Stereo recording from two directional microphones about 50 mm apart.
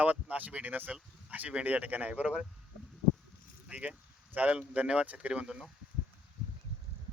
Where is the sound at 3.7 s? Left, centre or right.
Right.